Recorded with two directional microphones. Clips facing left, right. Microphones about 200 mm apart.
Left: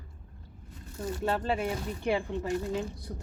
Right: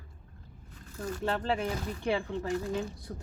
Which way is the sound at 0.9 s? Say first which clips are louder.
Left 1 dB; 25° left (ahead or behind).